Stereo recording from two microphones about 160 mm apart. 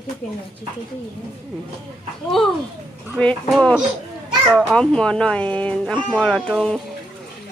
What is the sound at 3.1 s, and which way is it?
Speech, 5° left (ahead or behind).